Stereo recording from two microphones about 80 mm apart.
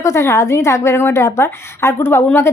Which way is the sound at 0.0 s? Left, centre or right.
Left.